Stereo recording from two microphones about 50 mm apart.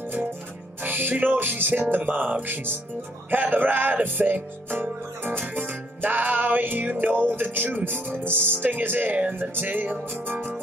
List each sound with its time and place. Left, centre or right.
0.8 s music: right